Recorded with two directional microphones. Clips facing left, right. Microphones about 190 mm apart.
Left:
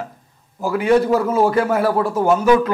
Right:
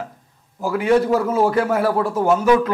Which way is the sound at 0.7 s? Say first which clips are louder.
Left 1 dB; 10° left (ahead or behind).